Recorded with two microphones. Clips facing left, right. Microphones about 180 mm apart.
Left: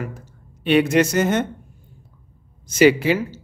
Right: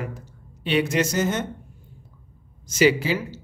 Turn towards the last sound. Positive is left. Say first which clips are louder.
# left 5 dB
turn(degrees=55)  # may be behind; listen again after turning